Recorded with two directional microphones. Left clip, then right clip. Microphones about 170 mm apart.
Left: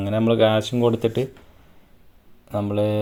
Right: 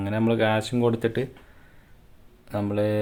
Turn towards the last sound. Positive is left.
turn(degrees=10)  # may be behind; listen again after turning